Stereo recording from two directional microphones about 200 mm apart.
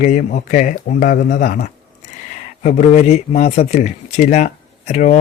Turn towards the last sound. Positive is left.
turn(degrees=35)  # may be behind; listen again after turning